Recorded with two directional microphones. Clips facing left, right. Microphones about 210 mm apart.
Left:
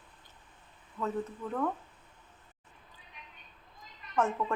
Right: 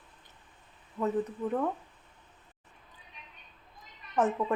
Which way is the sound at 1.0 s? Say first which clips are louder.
Right 4 dB; 20° right (ahead or behind).